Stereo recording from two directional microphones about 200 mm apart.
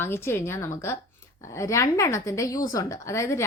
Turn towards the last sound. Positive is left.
turn(degrees=15)  # may be behind; listen again after turning